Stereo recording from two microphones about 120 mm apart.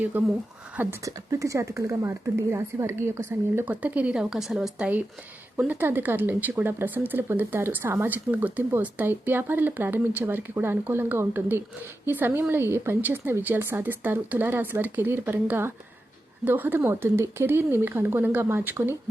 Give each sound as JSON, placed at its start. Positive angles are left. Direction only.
{"t": 0.1, "sound": "speech", "side_deg": -15}